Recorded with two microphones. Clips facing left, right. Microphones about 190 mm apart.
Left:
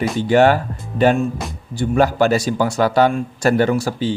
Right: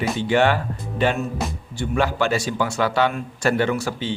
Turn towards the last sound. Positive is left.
turn(degrees=35)  # may be behind; listen again after turning